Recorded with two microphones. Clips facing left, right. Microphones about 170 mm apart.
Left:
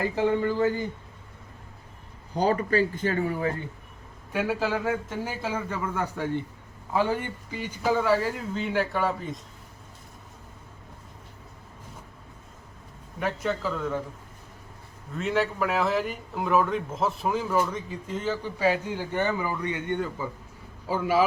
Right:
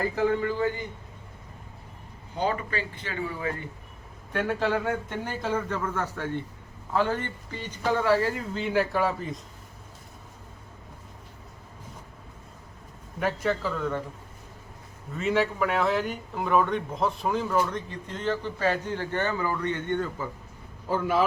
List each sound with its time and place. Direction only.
0.2 s speech: 25° left (ahead or behind)
2.3 s speech: 40° left (ahead or behind)
4.3 s a man's voice: 5° left (ahead or behind)
13.1 s a man's voice: centre (ahead or behind)
15.1 s a man's voice: centre (ahead or behind)